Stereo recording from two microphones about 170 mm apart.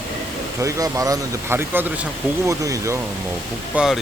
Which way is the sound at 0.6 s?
20° right (ahead or behind).